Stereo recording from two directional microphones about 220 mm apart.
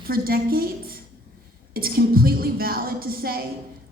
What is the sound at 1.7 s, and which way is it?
A woman's voice, 45° right (ahead or behind).